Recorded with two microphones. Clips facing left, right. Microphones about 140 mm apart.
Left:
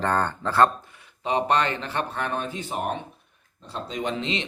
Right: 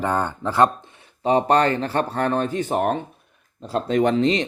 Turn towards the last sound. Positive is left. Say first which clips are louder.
# right 10 dB
turn(degrees=-45)  # may be behind; listen again after turning